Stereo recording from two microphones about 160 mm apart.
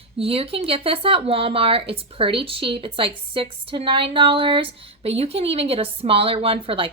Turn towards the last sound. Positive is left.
turn(degrees=-35)  # may be behind; listen again after turning